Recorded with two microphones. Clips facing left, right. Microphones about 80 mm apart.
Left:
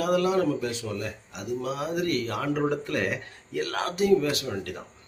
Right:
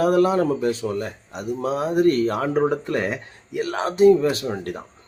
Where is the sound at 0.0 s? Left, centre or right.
Right.